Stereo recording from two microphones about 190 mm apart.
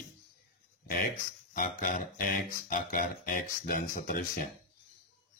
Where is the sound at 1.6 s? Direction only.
45° left (ahead or behind).